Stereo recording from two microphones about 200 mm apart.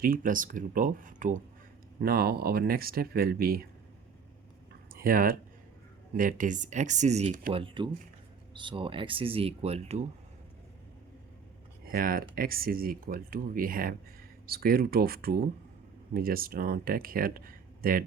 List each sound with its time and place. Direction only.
0.0 s speech: 45° right (ahead or behind)
4.9 s speech: 45° right (ahead or behind)
7.6 s speech: 25° right (ahead or behind)
11.9 s speech: 45° right (ahead or behind)